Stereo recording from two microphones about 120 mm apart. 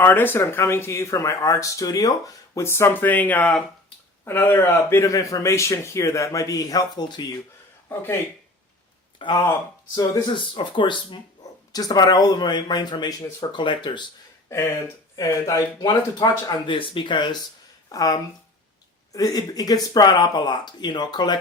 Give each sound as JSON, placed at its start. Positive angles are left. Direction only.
{"t": 0.0, "sound": "speech", "side_deg": 15}
{"t": 9.1, "sound": "speech", "side_deg": 40}
{"t": 15.1, "sound": "speech", "side_deg": 25}
{"t": 17.8, "sound": "speech", "side_deg": 30}